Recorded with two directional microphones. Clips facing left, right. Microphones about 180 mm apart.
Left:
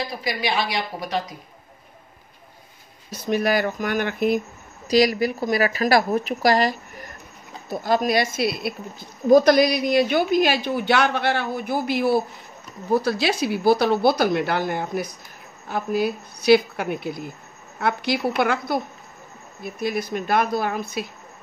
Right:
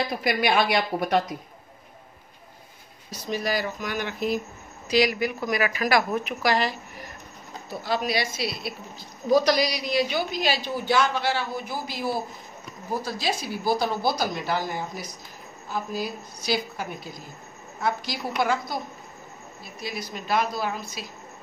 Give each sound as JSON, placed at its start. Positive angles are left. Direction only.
{"t": 0.2, "sound": "a woman's voice", "side_deg": -55}
{"t": 3.1, "sound": "a woman's voice", "side_deg": 60}
{"t": 4.8, "sound": "a woman's voice", "side_deg": 40}